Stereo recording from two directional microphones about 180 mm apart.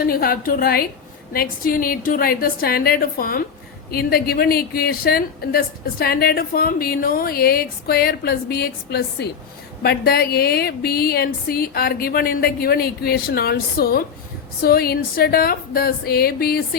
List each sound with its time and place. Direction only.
0.0 s a woman's voice: 55° left (ahead or behind)